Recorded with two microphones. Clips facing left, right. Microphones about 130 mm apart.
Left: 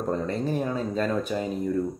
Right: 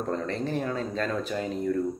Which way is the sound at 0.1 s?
15° left (ahead or behind).